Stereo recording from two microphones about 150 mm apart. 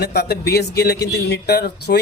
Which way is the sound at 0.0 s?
90° left.